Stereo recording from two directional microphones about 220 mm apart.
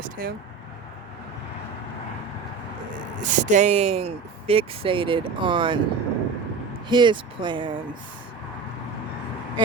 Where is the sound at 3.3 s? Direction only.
35° right (ahead or behind).